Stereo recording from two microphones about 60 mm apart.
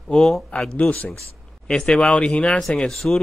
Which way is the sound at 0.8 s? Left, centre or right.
Left.